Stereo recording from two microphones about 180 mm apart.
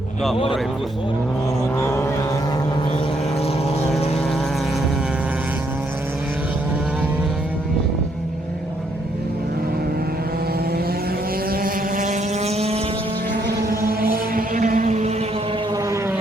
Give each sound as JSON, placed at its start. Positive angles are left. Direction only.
{"t": 1.8, "sound": "speech", "side_deg": 15}
{"t": 11.5, "sound": "vehicle", "side_deg": -50}
{"t": 13.3, "sound": "vehicle", "side_deg": -60}
{"t": 15.7, "sound": "vehicle", "side_deg": -15}